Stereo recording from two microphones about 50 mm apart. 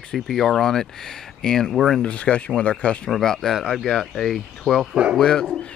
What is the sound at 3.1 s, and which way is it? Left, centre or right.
Speech, centre.